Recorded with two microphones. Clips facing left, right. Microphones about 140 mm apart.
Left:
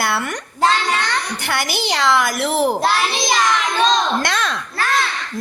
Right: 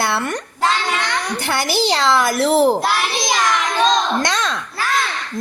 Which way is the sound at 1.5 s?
30° right (ahead or behind).